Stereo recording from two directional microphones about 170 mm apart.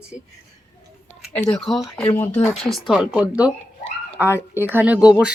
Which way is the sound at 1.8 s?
10° left (ahead or behind).